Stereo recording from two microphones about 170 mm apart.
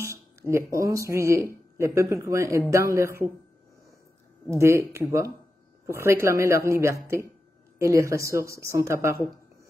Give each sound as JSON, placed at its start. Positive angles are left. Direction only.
{"t": 0.0, "sound": "a woman's voice", "side_deg": -15}
{"t": 4.5, "sound": "a woman's voice", "side_deg": -15}